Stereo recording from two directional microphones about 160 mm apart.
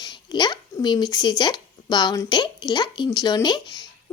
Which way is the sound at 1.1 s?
25° left (ahead or behind).